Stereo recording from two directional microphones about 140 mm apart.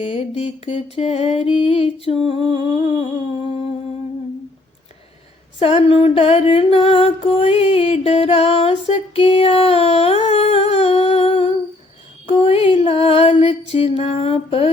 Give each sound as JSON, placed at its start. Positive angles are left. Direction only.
{"t": 0.0, "sound": "music", "side_deg": 40}
{"t": 2.6, "sound": "humming", "side_deg": 40}
{"t": 5.5, "sound": "music", "side_deg": 40}